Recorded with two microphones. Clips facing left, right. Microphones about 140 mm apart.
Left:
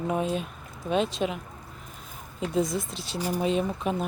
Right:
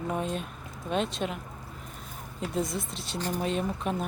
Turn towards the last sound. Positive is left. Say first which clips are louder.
# left 3 dB
turn(degrees=0)  # may be behind; listen again after turning